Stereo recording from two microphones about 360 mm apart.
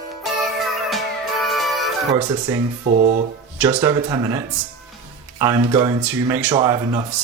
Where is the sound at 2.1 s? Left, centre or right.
Centre.